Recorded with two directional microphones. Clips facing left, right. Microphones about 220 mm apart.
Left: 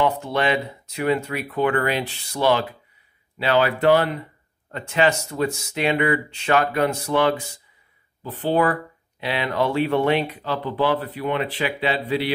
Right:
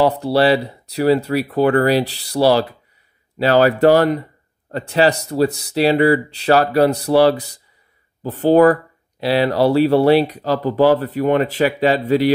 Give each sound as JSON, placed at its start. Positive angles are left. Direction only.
{"t": 0.0, "sound": "speech", "side_deg": -35}